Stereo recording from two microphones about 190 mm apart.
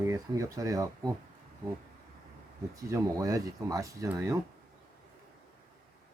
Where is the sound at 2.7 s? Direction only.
15° right (ahead or behind).